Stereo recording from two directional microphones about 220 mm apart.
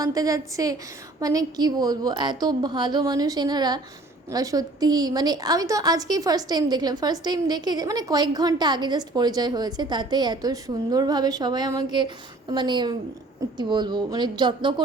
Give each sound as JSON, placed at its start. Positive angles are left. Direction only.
{"t": 0.0, "sound": "a woman's voice", "side_deg": -15}